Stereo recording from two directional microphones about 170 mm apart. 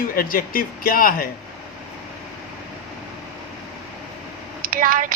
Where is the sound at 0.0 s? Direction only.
60° left (ahead or behind).